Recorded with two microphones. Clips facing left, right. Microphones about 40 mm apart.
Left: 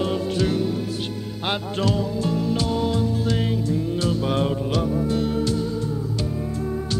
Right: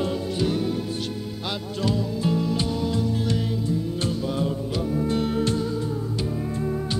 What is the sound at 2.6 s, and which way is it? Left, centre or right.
Music, left.